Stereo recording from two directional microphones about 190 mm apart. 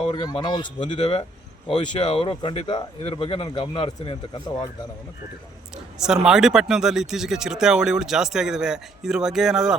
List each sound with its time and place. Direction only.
0.0 s speech: 25° left (ahead or behind)
5.7 s speech: 5° right (ahead or behind)